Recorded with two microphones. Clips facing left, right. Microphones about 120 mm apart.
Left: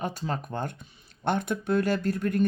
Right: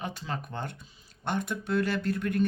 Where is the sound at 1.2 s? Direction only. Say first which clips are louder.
Left 4 dB; 55° left (ahead or behind).